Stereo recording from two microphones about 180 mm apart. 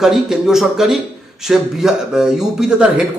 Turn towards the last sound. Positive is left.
turn(degrees=-5)  # may be behind; listen again after turning